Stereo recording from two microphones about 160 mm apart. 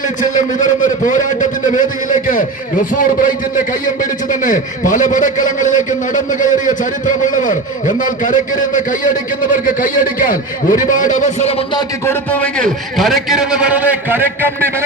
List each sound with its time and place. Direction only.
0.2 s a man's voice: 55° left (ahead or behind)
2.9 s a man's voice: 60° left (ahead or behind); by 11.8 s 40° left (ahead or behind)
12.0 s a man's voice: 10° left (ahead or behind); by 14.8 s 15° right (ahead or behind)